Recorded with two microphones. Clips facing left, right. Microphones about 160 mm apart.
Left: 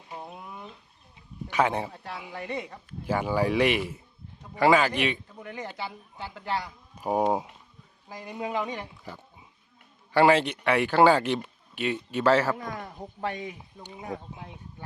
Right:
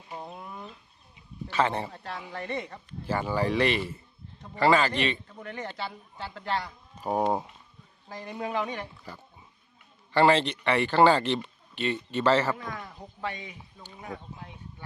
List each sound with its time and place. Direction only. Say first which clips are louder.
0.1 s a sound: right 1 dB; centre (ahead or behind)
1.5 s speech: left 1 dB; 10° left (ahead or behind)
13.2 s speech: left 3 dB; 50° left (ahead or behind)
14.0 s speech: left 3 dB; 20° left (ahead or behind)